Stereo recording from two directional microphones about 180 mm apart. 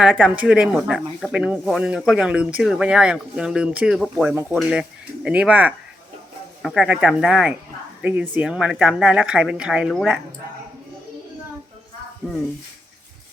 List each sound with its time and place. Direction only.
0.0 s speech: 5° right (ahead or behind)